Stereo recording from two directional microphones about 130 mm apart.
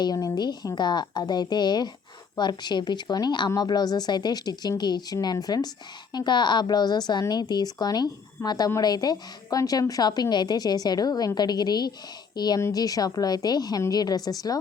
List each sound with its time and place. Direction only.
0.0 s a woman's voice: 30° left (ahead or behind)